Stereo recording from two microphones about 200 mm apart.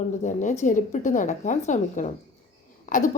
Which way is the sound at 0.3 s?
35° left (ahead or behind).